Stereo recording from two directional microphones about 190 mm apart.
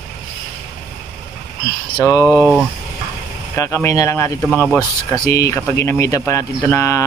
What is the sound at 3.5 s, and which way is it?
Speech, 15° left (ahead or behind).